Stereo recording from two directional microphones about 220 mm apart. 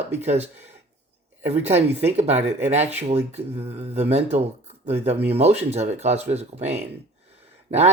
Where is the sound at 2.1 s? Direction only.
30° right (ahead or behind).